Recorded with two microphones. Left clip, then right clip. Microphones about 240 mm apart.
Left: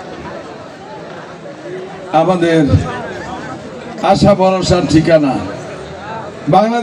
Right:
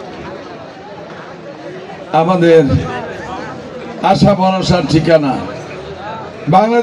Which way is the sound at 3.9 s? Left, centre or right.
Right.